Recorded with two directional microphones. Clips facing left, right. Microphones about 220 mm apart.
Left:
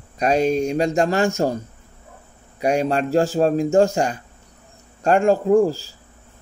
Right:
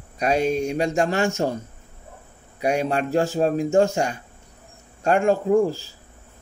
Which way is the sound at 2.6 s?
40° left (ahead or behind).